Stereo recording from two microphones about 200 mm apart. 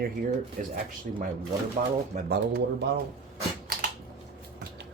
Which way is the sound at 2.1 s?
50° right (ahead or behind).